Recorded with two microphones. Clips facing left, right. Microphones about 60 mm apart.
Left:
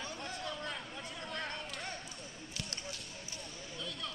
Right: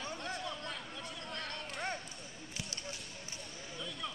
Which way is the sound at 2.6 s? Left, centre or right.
Right.